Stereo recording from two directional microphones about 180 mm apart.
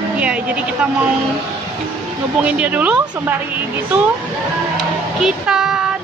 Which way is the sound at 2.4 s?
5° right (ahead or behind).